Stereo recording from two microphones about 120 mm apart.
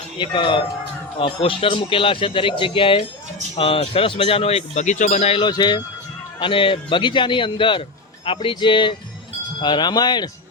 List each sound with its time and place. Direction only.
0.2 s speech: 40° left (ahead or behind); by 5.3 s 85° left
5.3 s speech: 40° left (ahead or behind)